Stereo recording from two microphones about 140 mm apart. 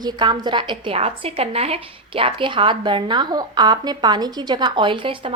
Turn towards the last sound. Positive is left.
turn(degrees=-35)  # may be behind; listen again after turning